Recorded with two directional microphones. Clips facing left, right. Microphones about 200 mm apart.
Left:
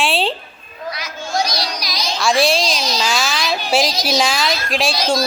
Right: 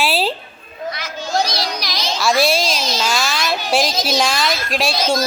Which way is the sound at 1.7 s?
55° right (ahead or behind).